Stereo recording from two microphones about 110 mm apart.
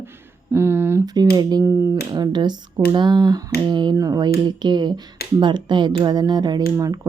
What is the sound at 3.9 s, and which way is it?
Speech, 30° right (ahead or behind).